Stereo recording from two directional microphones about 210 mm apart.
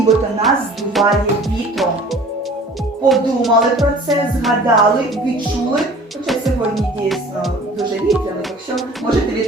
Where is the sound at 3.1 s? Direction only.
Centre (ahead or behind).